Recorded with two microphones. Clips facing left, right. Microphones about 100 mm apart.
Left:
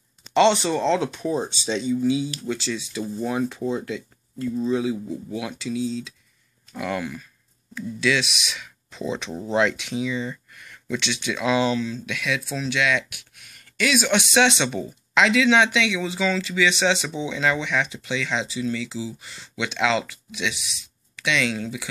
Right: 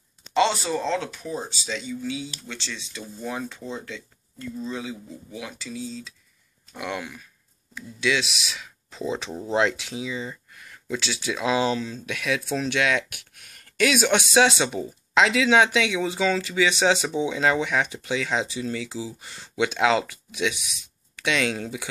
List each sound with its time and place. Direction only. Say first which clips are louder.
0.3 s speech: left 4 dB; 5° right (ahead or behind)
1.1 s speech: left 7 dB; 30° left (ahead or behind)
2.5 s speech: left 9 dB; 10° left (ahead or behind)
5.4 s speech: left 6 dB; 5° left (ahead or behind)
6.7 s speech: left 4 dB; 15° right (ahead or behind)
10.5 s a sound: left 1 dB; 30° right (ahead or behind)
11.0 s speech: left 1 dB; 35° right (ahead or behind)
12.4 s speech: even; 50° right (ahead or behind)